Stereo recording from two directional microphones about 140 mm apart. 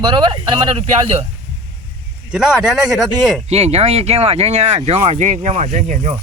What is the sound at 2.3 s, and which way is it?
Speech, 5° right (ahead or behind).